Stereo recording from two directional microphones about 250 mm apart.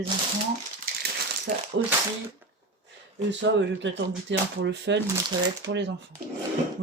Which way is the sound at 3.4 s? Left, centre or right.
Right.